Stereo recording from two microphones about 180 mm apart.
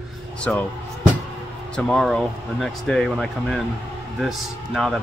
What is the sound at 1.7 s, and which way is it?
Speech, 5° left (ahead or behind).